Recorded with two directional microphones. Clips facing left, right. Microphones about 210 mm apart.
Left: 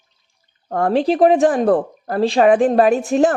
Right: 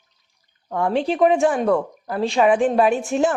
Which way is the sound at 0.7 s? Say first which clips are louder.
Left 4 dB; 40° left (ahead or behind).